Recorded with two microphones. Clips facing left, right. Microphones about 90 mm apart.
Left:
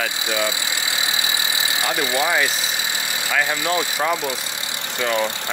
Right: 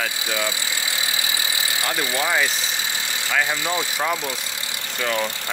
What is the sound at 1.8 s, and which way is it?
Speech, 20° left (ahead or behind).